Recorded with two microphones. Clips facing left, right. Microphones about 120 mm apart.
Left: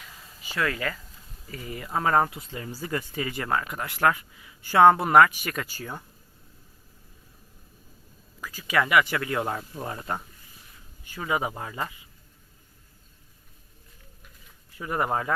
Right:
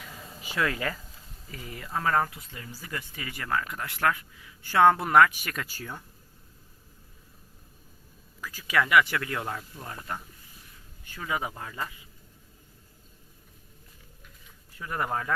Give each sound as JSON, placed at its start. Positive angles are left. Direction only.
{"t": 0.5, "sound": "speech", "side_deg": -15}
{"t": 1.5, "sound": "speech", "side_deg": 0}
{"t": 1.9, "sound": "speech", "side_deg": 20}
{"t": 3.7, "sound": "speech", "side_deg": 15}
{"t": 8.4, "sound": "a sound", "side_deg": 5}
{"t": 8.8, "sound": "speech", "side_deg": 5}
{"t": 9.6, "sound": "speech", "side_deg": 30}
{"t": 11.3, "sound": "speech", "side_deg": 15}
{"t": 14.8, "sound": "speech", "side_deg": 15}